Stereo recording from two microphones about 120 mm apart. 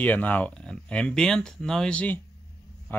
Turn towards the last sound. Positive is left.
turn(degrees=15)  # may be behind; listen again after turning